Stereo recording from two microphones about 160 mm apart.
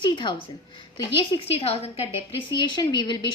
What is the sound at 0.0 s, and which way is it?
Speech, 30° left (ahead or behind).